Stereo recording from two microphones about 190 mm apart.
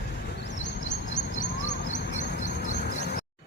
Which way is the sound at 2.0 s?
60° left (ahead or behind).